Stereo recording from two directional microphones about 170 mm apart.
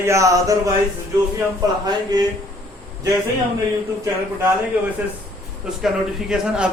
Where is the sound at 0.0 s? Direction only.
15° right (ahead or behind).